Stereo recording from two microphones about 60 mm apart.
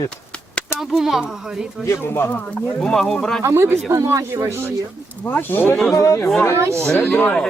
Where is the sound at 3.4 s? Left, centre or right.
Right.